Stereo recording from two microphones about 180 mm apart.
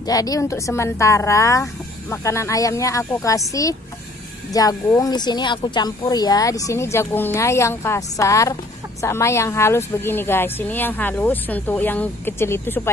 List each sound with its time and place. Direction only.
0.0 s speech: 20° left (ahead or behind)